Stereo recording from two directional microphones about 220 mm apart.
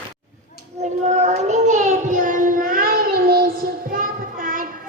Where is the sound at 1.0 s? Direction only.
30° right (ahead or behind).